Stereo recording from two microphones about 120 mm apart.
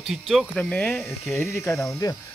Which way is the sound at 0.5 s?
10° left (ahead or behind).